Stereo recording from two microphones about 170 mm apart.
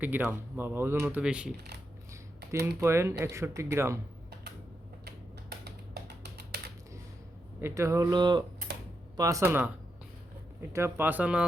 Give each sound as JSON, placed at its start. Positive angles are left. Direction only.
{"t": 0.0, "sound": "speech", "side_deg": -10}
{"t": 2.8, "sound": "speech", "side_deg": -15}
{"t": 5.0, "sound": "typing", "side_deg": -70}
{"t": 7.6, "sound": "speech", "side_deg": -15}